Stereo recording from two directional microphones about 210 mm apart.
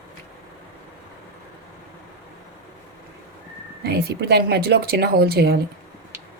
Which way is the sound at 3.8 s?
50° right (ahead or behind).